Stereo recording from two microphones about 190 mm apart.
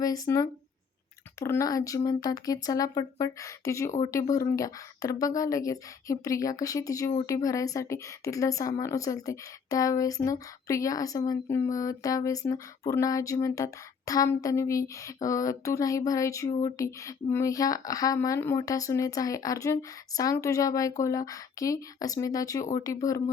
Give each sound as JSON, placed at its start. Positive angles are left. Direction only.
{"t": 0.0, "sound": "speech", "side_deg": 20}